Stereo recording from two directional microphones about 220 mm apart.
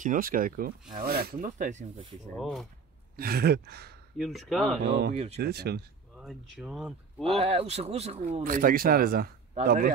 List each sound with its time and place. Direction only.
0.0 s speech: 40° right (ahead or behind)
2.3 s speech: centre (ahead or behind)
3.2 s a sound: 45° right (ahead or behind)
4.2 s speech: centre (ahead or behind)
4.8 s a sound: 50° right (ahead or behind)
5.1 s speech: 30° right (ahead or behind)
5.4 s a sound: 45° right (ahead or behind)
6.1 s speech: centre (ahead or behind)
7.2 s speech: 25° right (ahead or behind)
8.5 s speech: 40° right (ahead or behind)